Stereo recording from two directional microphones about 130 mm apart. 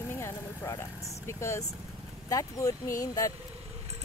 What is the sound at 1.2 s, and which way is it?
Speech, 20° left (ahead or behind).